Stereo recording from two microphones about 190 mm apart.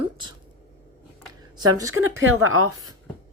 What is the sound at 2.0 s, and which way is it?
Speech, 90° right.